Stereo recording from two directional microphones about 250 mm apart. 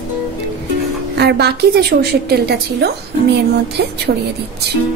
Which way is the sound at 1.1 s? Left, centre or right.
Right.